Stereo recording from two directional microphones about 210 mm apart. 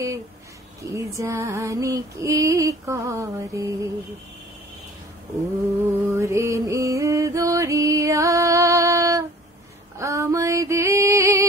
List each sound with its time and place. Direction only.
0.8 s female singing: 15° right (ahead or behind)
5.4 s mantra: 15° right (ahead or behind)
9.9 s a sound: 15° right (ahead or behind)